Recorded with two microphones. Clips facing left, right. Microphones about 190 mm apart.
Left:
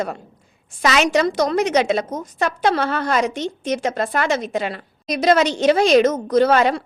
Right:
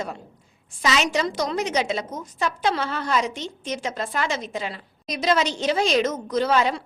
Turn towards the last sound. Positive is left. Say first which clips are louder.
# left 6 dB
turn(degrees=65)  # may be behind; listen again after turning